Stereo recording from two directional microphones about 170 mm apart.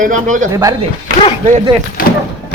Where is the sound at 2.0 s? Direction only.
55° left (ahead or behind).